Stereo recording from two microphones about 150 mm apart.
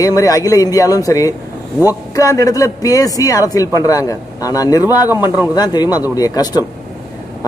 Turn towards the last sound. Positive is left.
turn(degrees=25)  # may be behind; listen again after turning